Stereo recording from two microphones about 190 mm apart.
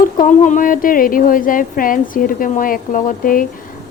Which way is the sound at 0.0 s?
40° left (ahead or behind).